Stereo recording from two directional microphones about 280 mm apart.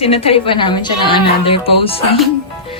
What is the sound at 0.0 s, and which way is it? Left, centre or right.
A woman's voice, left.